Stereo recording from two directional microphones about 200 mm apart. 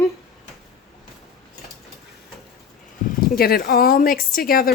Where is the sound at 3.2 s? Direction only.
50° left (ahead or behind).